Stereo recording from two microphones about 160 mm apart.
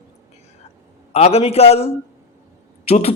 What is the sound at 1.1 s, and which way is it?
A woman's voice, 40° left (ahead or behind).